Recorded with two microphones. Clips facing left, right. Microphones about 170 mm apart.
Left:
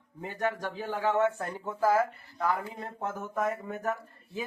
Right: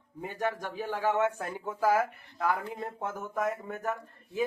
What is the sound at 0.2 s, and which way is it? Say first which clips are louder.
Speech: left 1 dB; 10° right (ahead or behind).